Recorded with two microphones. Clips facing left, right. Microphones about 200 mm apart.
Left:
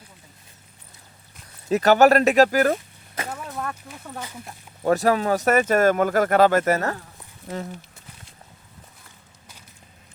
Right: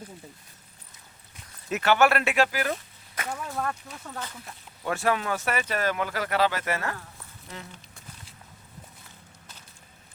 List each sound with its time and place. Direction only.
1.7 s speech: 40° left (ahead or behind)
3.2 s a sound: 5° left (ahead or behind)
4.8 s speech: 40° left (ahead or behind)